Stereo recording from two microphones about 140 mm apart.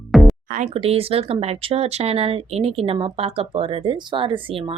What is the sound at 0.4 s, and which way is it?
Speech, 70° right (ahead or behind).